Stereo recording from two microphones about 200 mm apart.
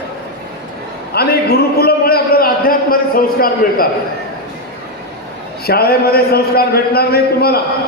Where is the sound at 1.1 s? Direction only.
50° left (ahead or behind).